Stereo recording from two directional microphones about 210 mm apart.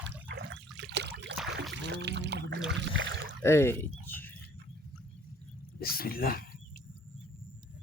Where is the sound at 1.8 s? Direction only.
55° right (ahead or behind).